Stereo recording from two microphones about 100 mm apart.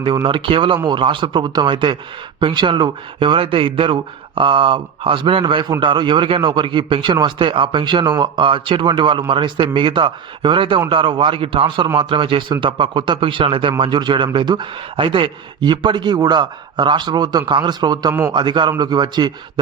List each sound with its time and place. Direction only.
0.3 s a man's voice: 60° right (ahead or behind)